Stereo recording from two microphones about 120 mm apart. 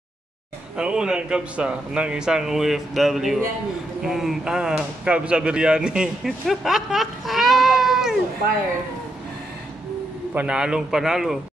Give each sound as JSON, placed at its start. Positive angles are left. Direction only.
{"t": 0.7, "sound": "a man's voice", "side_deg": -10}
{"t": 10.3, "sound": "a man's voice", "side_deg": -10}